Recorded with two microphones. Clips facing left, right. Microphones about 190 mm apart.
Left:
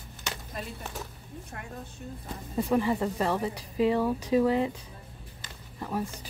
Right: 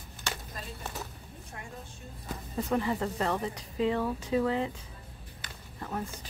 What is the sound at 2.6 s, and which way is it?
Speech, 10° left (ahead or behind).